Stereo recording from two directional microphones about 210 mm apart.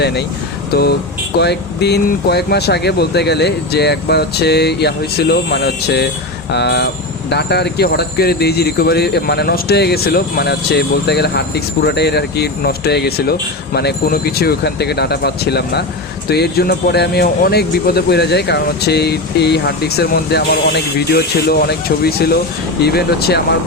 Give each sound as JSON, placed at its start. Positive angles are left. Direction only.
{"t": 0.0, "sound": "speech", "side_deg": 50}